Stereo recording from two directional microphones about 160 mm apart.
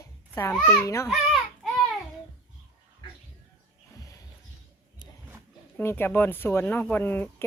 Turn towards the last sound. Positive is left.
turn(degrees=10)  # may be behind; listen again after turning